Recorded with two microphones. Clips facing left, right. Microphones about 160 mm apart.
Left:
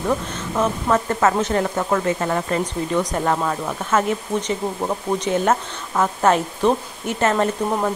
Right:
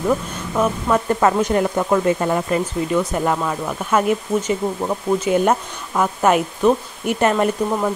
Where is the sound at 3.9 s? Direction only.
10° right (ahead or behind).